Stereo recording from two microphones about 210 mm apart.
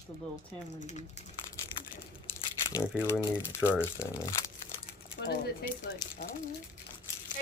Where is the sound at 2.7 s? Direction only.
15° left (ahead or behind).